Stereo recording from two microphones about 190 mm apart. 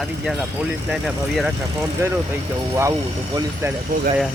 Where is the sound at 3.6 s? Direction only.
15° right (ahead or behind).